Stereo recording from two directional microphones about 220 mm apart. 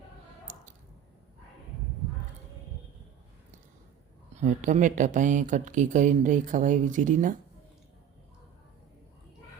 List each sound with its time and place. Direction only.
0.5 s squish: 35° right (ahead or behind)
4.4 s speech: 35° right (ahead or behind)